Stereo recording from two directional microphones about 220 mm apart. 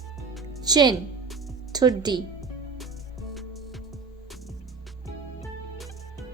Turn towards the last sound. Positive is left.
turn(degrees=0)  # may be behind; listen again after turning